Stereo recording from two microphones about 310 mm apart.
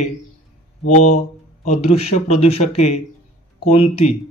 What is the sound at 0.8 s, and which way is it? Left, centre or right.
Speech, left.